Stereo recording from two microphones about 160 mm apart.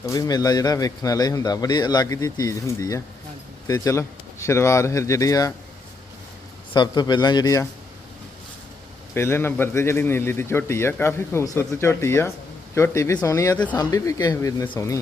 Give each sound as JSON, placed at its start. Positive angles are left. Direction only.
{"t": 0.0, "sound": "a man's voice", "side_deg": 20}
{"t": 6.7, "sound": "a man's voice", "side_deg": 25}
{"t": 9.1, "sound": "a man's voice", "side_deg": 15}